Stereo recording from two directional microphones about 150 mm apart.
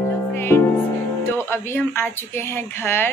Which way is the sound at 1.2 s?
15° left (ahead or behind).